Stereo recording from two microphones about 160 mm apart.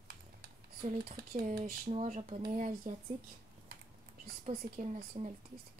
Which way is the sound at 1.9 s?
45° right (ahead or behind).